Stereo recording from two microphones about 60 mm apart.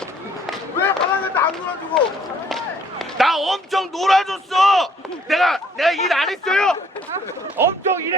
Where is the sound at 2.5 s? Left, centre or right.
Centre.